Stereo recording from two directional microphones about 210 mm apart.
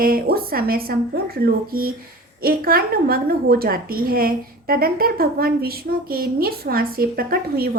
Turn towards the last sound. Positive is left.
turn(degrees=-45)  # may be behind; listen again after turning